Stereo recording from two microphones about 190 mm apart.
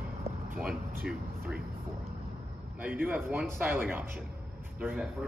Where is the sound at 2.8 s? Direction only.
10° right (ahead or behind).